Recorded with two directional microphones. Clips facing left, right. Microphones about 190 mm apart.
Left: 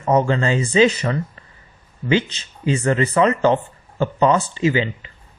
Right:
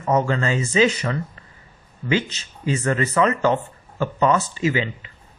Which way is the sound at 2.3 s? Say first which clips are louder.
Left 3 dB; 30° left (ahead or behind).